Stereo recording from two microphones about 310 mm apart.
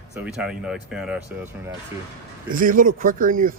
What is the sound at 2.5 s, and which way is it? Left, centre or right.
Speech, right.